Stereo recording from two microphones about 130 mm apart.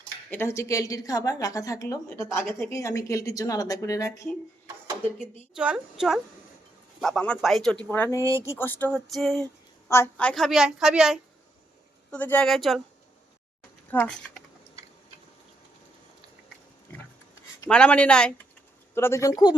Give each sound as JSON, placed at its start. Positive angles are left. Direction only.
{"t": 0.3, "sound": "a woman's voice", "side_deg": 20}
{"t": 5.5, "sound": "a woman's voice", "side_deg": -5}
{"t": 7.0, "sound": "a woman's voice", "side_deg": 5}
{"t": 7.9, "sound": "speech", "side_deg": 15}
{"t": 8.2, "sound": "speech", "side_deg": -25}
{"t": 8.4, "sound": "speech", "side_deg": 15}
{"t": 9.0, "sound": "a woman's voice", "side_deg": 0}
{"t": 9.9, "sound": "a woman's voice", "side_deg": 15}
{"t": 12.1, "sound": "speech", "side_deg": 10}
{"t": 12.5, "sound": "a woman's voice", "side_deg": 0}
{"t": 13.9, "sound": "speech", "side_deg": 10}
{"t": 17.7, "sound": "speech", "side_deg": 10}
{"t": 18.9, "sound": "a woman's voice", "side_deg": 20}